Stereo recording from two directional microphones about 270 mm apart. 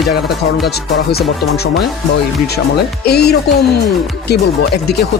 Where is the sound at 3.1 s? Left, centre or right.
Left.